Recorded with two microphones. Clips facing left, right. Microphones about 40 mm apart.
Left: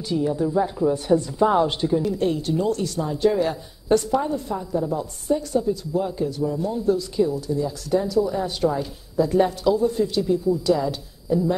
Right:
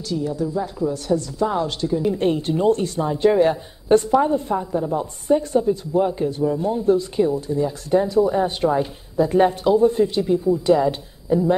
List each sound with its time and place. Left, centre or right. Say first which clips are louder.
0.1 s a woman's voice: left 2 dB; centre
2.0 s a woman's voice: right 3 dB; right